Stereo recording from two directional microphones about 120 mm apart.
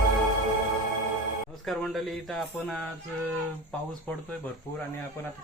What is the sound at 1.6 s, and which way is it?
Speech, centre (ahead or behind).